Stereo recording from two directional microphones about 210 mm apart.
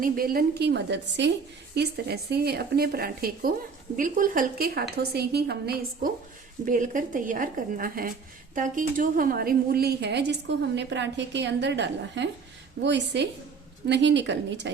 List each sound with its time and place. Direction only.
0.0 s a woman's voice: 45° right (ahead or behind)
6.7 s a woman's voice: 40° right (ahead or behind); by 14.7 s 55° right (ahead or behind)